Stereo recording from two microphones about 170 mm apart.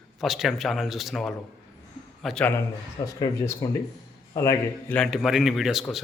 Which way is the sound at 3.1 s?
20° left (ahead or behind).